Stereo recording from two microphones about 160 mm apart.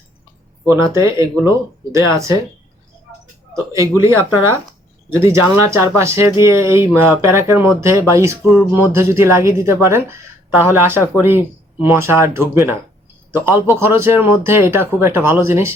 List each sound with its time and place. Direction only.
0.7 s speech: 20° right (ahead or behind)
3.5 s speech: 20° right (ahead or behind)